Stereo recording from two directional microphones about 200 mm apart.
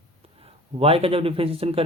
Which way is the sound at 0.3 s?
30° right (ahead or behind).